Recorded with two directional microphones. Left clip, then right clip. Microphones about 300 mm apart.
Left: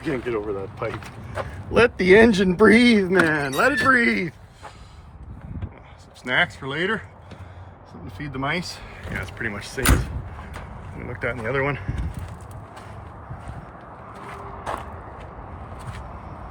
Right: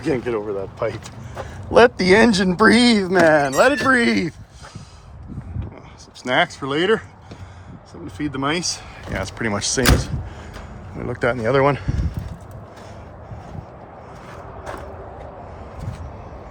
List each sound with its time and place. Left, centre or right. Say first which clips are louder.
0.0 s speech: right 4 dB; centre
6.2 s speech: right 3 dB; centre
8.2 s speech: right 4 dB; centre